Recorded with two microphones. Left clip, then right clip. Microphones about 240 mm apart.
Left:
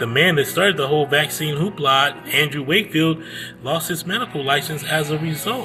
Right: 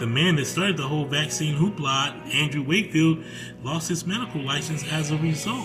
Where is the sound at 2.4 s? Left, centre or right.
Centre.